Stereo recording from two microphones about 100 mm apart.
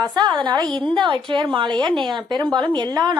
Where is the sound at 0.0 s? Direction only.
50° right (ahead or behind).